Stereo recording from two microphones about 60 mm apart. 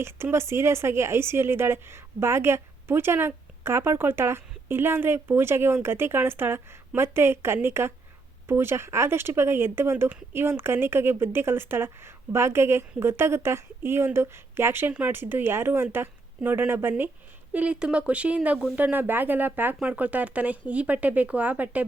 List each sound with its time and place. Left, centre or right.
0.0 s speech: right
17.5 s speech: right
18.8 s speech: right